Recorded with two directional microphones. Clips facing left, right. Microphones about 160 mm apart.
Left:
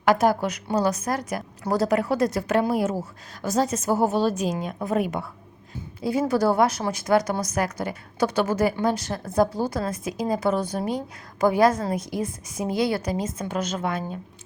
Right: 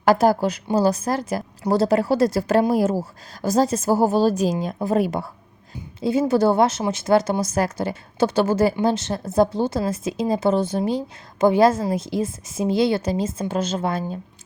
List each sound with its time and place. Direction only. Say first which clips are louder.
0.0 s a woman's voice: right 3 dB; 35° right (ahead or behind)